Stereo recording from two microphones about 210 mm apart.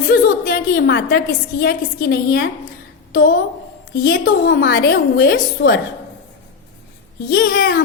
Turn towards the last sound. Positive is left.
turn(degrees=50)  # may be behind; listen again after turning